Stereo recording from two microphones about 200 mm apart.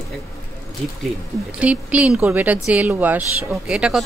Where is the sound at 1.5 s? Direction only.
5° right (ahead or behind).